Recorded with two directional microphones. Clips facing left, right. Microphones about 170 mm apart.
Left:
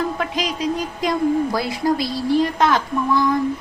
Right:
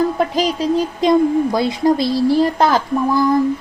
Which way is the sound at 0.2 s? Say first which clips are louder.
Right 6 dB; 35° right (ahead or behind).